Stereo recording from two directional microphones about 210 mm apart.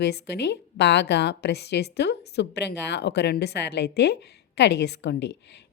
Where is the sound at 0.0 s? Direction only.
55° left (ahead or behind).